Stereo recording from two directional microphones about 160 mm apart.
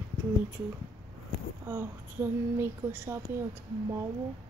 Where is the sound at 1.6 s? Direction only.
15° right (ahead or behind).